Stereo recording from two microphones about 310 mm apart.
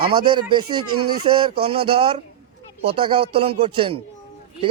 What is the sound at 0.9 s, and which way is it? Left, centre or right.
Speech, right.